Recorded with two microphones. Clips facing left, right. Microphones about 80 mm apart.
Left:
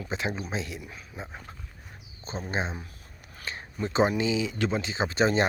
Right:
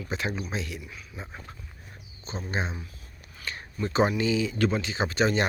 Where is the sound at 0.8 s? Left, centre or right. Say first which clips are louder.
Even; left.